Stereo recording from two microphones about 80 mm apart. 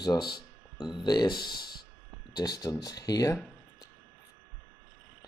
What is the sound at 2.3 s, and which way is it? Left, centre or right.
Speech, left.